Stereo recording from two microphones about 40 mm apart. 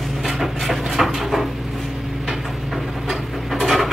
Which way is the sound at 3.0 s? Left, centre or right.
Centre.